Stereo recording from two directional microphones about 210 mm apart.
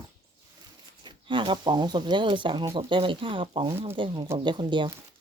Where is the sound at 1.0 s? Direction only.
20° right (ahead or behind).